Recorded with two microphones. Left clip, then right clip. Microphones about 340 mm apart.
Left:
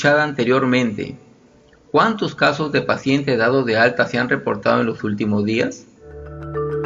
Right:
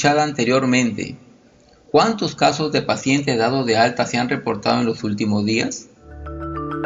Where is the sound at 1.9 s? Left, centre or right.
Right.